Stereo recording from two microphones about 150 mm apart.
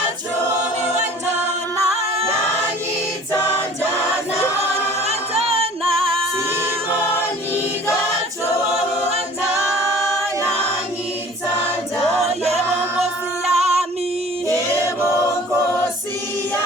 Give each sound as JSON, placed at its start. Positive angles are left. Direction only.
{"t": 5.0, "sound": "a capella", "side_deg": -40}
{"t": 13.0, "sound": "music", "side_deg": -45}
{"t": 14.4, "sound": "choir", "side_deg": -20}